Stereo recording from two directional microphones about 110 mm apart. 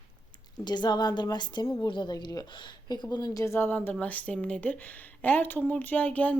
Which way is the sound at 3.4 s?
20° left (ahead or behind).